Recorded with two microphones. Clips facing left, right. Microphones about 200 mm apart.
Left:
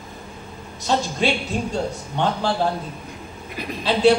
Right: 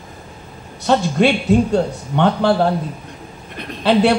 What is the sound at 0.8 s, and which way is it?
A man's voice, 60° right (ahead or behind).